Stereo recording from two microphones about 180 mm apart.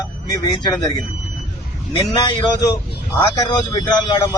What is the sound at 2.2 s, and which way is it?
A man's voice, 25° left (ahead or behind).